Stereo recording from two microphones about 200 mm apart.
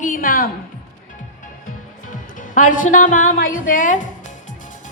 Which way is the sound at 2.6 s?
40° left (ahead or behind).